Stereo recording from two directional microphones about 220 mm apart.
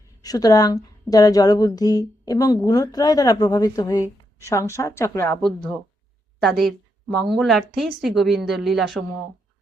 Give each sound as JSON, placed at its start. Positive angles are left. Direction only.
{"t": 0.2, "sound": "a woman's voice", "side_deg": 15}
{"t": 6.4, "sound": "a woman's voice", "side_deg": 0}